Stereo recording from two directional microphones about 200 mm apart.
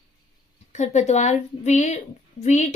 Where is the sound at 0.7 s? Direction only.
35° left (ahead or behind).